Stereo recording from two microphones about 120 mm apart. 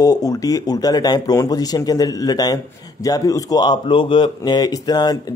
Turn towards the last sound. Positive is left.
turn(degrees=35)  # may be behind; listen again after turning